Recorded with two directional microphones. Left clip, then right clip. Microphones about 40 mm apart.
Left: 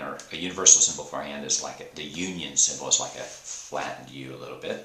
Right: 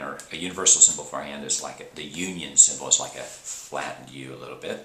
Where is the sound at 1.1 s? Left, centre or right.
Centre.